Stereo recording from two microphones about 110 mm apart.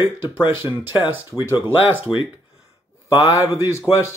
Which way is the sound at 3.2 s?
25° right (ahead or behind).